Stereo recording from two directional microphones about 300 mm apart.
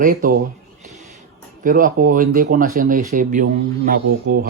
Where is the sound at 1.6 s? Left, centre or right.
Right.